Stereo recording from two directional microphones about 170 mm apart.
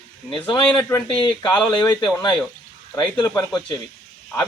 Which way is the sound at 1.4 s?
5° left (ahead or behind).